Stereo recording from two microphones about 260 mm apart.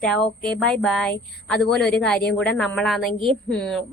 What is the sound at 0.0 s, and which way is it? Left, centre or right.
A woman's voice, centre.